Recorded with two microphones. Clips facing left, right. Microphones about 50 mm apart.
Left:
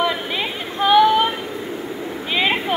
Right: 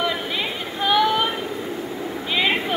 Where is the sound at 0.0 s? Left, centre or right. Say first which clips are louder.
Left 3 dB; left.